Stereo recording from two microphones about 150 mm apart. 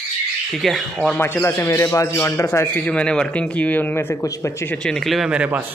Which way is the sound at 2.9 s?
5° left (ahead or behind).